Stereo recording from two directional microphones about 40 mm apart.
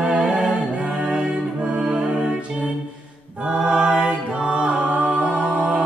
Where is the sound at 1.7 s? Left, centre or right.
Centre.